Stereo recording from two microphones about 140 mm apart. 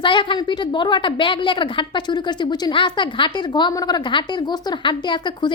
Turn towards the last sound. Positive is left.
turn(degrees=35)  # may be behind; listen again after turning